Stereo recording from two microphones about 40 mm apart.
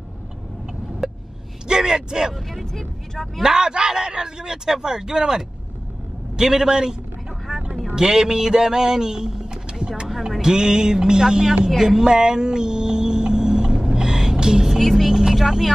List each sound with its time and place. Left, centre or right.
1.0 s a sound: centre
1.7 s speech: centre
2.3 s speech: centre
3.4 s speech: centre
10.0 s music: centre
10.4 s speech: centre
14.8 s speech: centre
15.0 s vehicle: centre